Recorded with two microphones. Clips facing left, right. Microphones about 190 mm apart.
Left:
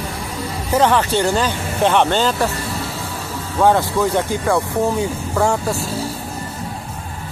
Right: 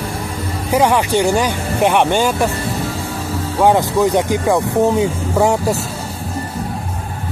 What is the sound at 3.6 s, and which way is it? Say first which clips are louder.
Speech: right 2 dB; 15° right (ahead or behind).